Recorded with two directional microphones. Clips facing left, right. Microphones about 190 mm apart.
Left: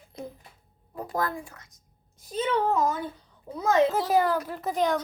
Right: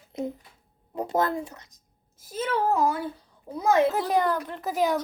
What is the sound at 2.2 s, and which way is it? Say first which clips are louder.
A woman's voice: left 1 dB; 5° right (ahead or behind).